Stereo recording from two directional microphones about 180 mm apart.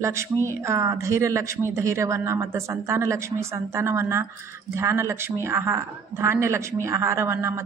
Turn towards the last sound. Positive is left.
turn(degrees=-15)  # may be behind; listen again after turning